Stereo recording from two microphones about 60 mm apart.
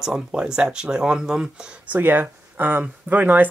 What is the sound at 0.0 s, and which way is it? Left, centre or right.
Speech, centre.